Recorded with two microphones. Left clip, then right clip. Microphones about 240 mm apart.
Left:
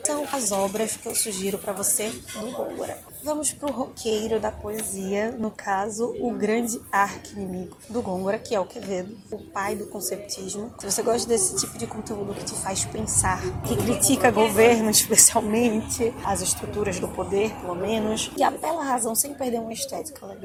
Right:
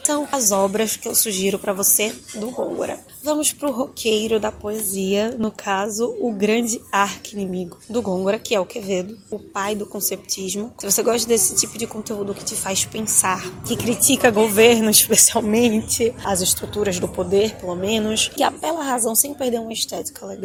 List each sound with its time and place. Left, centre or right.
0.1 s a woman's voice: right
3.2 s a woman's voice: right